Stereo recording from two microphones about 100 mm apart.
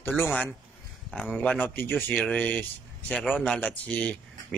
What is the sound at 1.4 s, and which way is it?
Speech, 15° left (ahead or behind).